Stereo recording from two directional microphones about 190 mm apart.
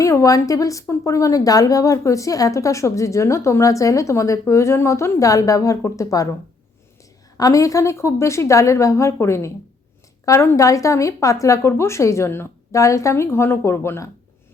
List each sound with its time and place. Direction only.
0.0 s a woman's voice: 15° left (ahead or behind)
7.3 s a woman's voice: 20° left (ahead or behind)